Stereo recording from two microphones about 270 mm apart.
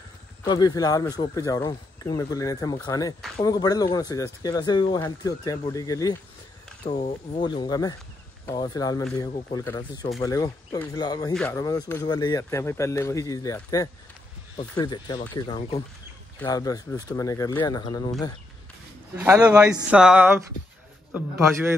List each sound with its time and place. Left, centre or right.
0.4 s speech: centre
19.1 s speech: centre